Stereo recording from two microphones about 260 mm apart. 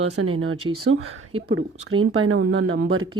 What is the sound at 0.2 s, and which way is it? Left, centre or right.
Speech, right.